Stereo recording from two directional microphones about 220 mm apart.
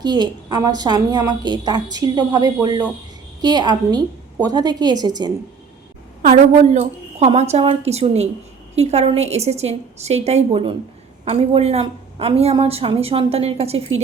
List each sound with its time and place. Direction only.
0.0 s a woman's voice: 20° right (ahead or behind)
6.2 s a woman's voice: 35° right (ahead or behind)